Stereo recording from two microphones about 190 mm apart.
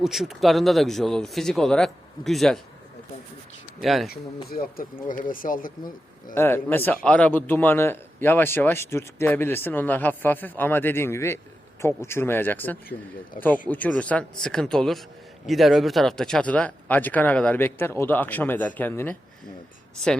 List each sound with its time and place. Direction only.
0.0 s a man's voice: centre (ahead or behind)
3.8 s a man's voice: centre (ahead or behind)
4.4 s speech: 50° left (ahead or behind)
6.3 s a man's voice: 10° left (ahead or behind)